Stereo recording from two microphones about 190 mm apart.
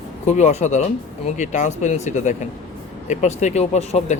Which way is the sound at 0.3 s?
40° left (ahead or behind).